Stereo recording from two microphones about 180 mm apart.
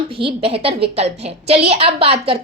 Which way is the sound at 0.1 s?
30° right (ahead or behind).